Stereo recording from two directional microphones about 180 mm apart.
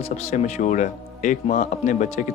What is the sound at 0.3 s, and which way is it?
Speech, 40° left (ahead or behind).